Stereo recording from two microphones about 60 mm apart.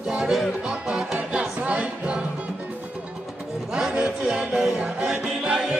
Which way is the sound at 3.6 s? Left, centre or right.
Centre.